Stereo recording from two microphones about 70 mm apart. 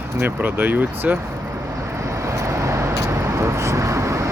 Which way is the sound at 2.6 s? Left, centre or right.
Right.